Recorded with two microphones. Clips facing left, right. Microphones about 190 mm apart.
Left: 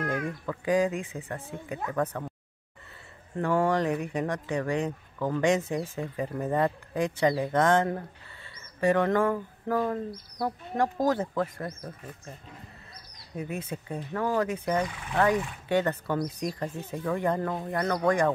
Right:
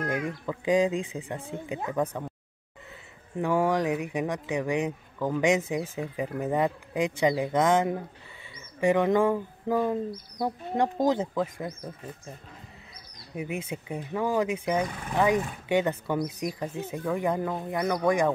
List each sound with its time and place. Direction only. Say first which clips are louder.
0.0 s speech: right 1 dB; 15° right (ahead or behind)
3.3 s speech: even; 10° right (ahead or behind)
13.3 s speech: right 1 dB; 10° right (ahead or behind)